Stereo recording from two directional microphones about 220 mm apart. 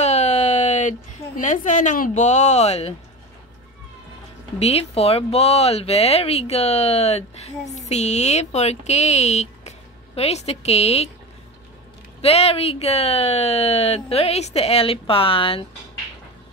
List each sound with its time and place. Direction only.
0.0 s a sound: 30° left (ahead or behind)
4.6 s speech: 30° left (ahead or behind)
12.2 s speech: 30° left (ahead or behind)